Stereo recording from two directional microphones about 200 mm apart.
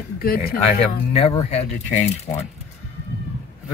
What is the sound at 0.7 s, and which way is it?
Speech, 30° left (ahead or behind).